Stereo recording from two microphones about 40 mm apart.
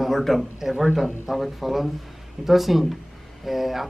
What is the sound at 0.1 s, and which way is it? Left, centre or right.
Speech, centre.